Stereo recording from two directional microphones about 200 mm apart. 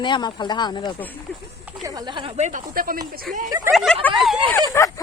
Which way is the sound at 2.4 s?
40° right (ahead or behind).